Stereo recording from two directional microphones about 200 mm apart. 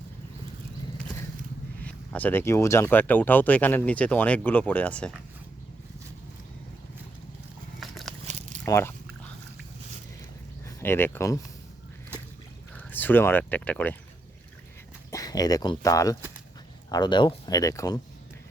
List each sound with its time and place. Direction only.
1.8 s speech: 5° left (ahead or behind)
7.8 s biting: centre (ahead or behind)
8.3 s a sound: 35° right (ahead or behind)
8.6 s speech: 15° left (ahead or behind)
10.7 s speech: 15° left (ahead or behind)
12.7 s speech: 10° left (ahead or behind)
15.1 s speech: 20° left (ahead or behind)